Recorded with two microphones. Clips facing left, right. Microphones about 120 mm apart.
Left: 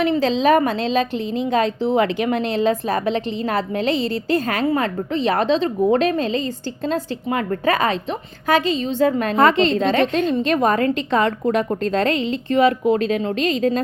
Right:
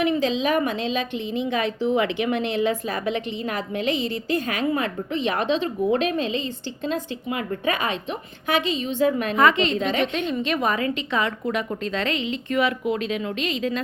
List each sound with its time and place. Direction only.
0.0 s a woman's voice: 35° left (ahead or behind)